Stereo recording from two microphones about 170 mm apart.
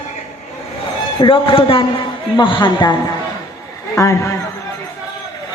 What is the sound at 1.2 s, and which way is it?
A man's voice, 30° left (ahead or behind).